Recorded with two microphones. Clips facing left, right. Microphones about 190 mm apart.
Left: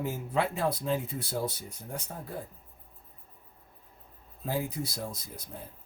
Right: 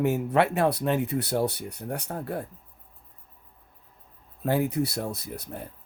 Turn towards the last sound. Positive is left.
turn(degrees=-65)  # may be behind; listen again after turning